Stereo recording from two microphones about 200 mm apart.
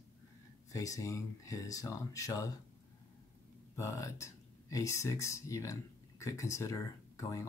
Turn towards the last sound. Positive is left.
turn(degrees=15)  # may be behind; listen again after turning